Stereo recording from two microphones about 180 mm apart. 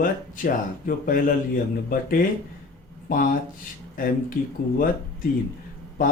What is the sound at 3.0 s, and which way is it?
Speech, 50° left (ahead or behind).